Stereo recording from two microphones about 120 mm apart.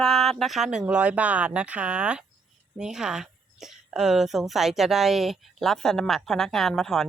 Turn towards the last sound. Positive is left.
turn(degrees=5)  # may be behind; listen again after turning